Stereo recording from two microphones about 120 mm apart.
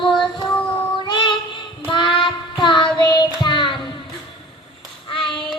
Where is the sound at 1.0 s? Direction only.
40° left (ahead or behind).